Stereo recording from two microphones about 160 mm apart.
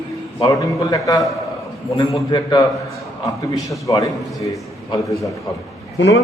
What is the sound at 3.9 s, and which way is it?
Speech, 20° left (ahead or behind).